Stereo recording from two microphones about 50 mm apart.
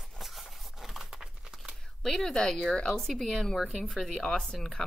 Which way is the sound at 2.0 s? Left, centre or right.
Centre.